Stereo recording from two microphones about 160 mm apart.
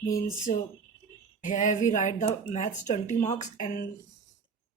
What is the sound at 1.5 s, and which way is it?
Speech, 50° left (ahead or behind).